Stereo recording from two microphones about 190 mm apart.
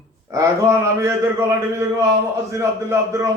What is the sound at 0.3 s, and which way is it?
A man's voice, 15° right (ahead or behind).